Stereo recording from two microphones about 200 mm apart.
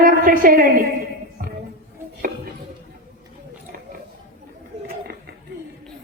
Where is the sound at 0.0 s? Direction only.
45° right (ahead or behind).